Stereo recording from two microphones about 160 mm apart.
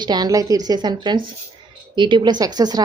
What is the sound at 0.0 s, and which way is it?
Speech, 25° right (ahead or behind).